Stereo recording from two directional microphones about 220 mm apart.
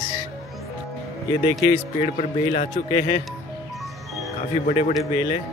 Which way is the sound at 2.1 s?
35° left (ahead or behind).